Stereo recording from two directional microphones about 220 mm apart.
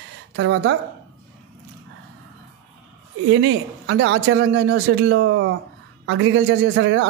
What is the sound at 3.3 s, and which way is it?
Speech, 60° right (ahead or behind).